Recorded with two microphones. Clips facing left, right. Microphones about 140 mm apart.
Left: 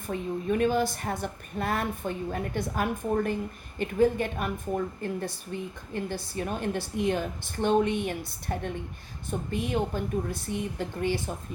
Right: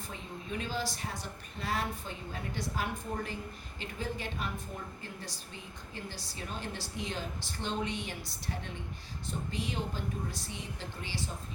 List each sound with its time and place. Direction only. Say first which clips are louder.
0.1 s speech: left 14 dB; 55° left (ahead or behind)